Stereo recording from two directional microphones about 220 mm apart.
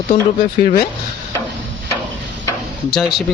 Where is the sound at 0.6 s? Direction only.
40° left (ahead or behind).